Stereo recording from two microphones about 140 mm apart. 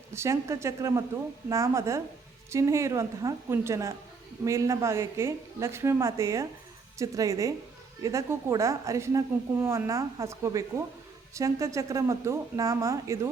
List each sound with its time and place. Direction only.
0.1 s a woman's voice: 20° right (ahead or behind)